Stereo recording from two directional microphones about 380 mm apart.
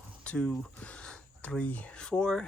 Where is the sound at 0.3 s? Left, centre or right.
Centre.